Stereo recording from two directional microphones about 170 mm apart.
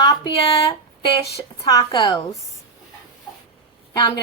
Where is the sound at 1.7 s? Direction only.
25° left (ahead or behind).